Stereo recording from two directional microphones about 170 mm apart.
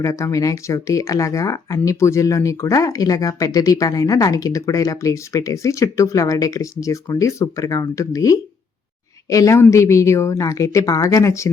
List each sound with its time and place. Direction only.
0.0 s a woman's voice: 20° left (ahead or behind)